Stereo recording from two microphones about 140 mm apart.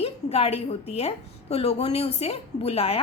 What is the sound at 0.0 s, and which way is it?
A woman's voice, 45° left (ahead or behind).